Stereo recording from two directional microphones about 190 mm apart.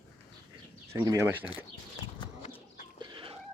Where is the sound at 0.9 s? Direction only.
15° right (ahead or behind).